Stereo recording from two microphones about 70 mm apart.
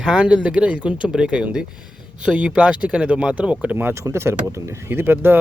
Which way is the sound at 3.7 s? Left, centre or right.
Right.